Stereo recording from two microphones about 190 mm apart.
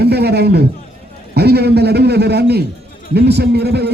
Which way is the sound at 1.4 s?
55° right (ahead or behind).